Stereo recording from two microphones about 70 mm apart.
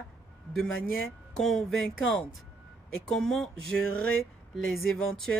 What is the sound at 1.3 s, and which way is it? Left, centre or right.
Speech, centre.